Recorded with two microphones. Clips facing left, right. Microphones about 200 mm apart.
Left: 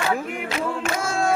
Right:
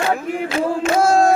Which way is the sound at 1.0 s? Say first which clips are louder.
Right 11 dB; 40° right (ahead or behind).